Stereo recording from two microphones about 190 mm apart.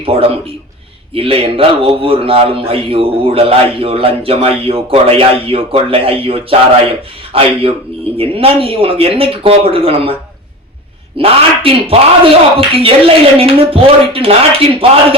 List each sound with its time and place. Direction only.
0.0 s speech: 30° right (ahead or behind)
11.2 s speech: 30° right (ahead or behind)